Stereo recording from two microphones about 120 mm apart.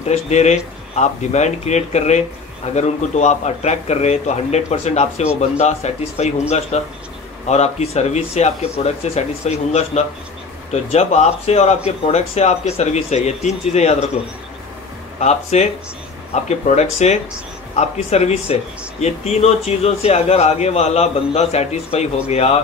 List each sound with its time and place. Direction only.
0.1 s speech: 70° left (ahead or behind)
15.1 s speech: 70° left (ahead or behind)